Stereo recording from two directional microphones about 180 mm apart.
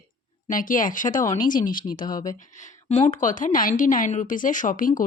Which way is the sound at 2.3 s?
45° left (ahead or behind).